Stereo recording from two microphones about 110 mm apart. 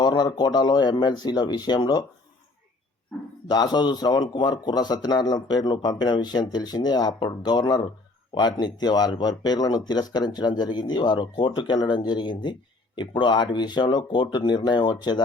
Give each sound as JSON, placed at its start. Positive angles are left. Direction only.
{"t": 0.0, "sound": "a man's voice", "side_deg": 40}
{"t": 3.5, "sound": "a man's voice", "side_deg": 40}